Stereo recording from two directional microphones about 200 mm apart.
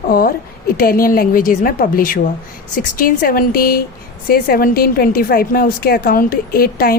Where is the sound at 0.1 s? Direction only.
45° left (ahead or behind).